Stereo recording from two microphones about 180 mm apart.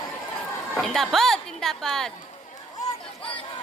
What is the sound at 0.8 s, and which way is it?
A woman's voice, centre (ahead or behind).